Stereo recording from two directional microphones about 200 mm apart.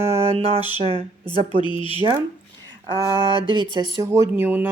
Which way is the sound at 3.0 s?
25° right (ahead or behind).